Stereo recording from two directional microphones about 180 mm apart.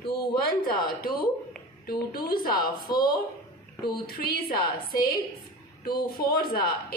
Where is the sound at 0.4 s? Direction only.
55° left (ahead or behind).